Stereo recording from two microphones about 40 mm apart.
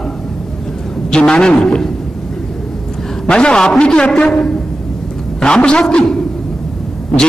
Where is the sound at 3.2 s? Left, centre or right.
Left.